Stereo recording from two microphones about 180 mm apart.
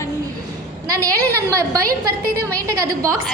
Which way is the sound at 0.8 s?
20° right (ahead or behind).